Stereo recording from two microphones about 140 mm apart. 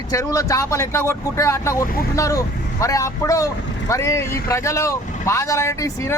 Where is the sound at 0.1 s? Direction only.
25° left (ahead or behind).